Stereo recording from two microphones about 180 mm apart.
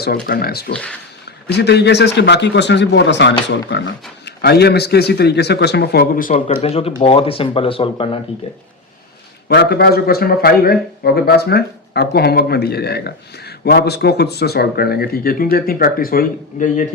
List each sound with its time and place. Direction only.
0.0 s a man's voice: 60° left (ahead or behind)
0.7 s speech: 5° left (ahead or behind)
1.5 s a man's voice: 65° left (ahead or behind)
6.3 s speech: 35° left (ahead or behind)
9.5 s a man's voice: 60° left (ahead or behind); by 16.8 s 45° left (ahead or behind)